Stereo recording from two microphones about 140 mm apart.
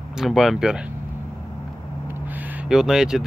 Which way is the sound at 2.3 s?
10° right (ahead or behind).